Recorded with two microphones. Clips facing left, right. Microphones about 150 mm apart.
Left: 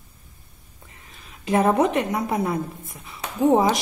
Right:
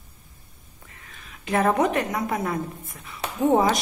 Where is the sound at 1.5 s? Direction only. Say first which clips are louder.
Left 2 dB; 10° left (ahead or behind).